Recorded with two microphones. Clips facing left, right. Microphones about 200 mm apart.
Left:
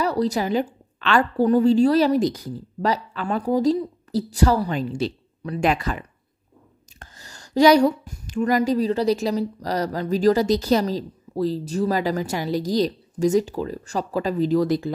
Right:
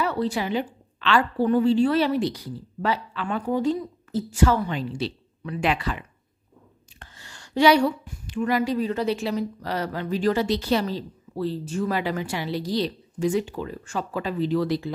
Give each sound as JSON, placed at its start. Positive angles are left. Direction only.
{"t": 0.0, "sound": "a woman's voice", "side_deg": 40}